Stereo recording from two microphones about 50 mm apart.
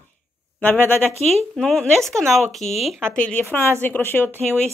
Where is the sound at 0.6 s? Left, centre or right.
Left.